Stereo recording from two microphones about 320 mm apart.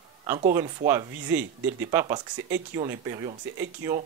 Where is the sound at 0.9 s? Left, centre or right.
Centre.